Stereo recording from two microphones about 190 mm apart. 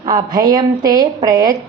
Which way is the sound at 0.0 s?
20° right (ahead or behind).